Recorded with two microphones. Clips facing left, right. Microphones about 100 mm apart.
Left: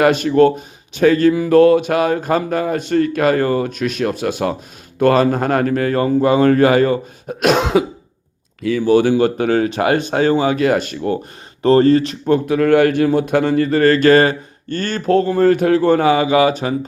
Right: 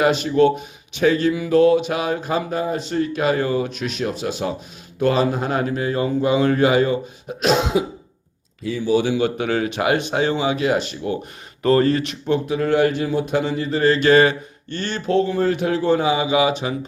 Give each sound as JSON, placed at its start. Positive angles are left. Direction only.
{"t": 0.0, "sound": "speech", "side_deg": 55}
{"t": 11.6, "sound": "speech", "side_deg": 30}